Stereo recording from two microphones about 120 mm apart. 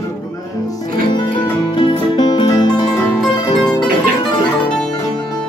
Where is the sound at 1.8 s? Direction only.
40° left (ahead or behind).